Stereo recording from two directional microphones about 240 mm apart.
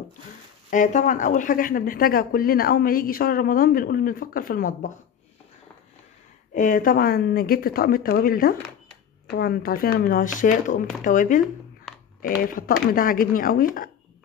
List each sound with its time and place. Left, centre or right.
0.7 s speech: left
6.5 s speech: left
12.9 s speech: left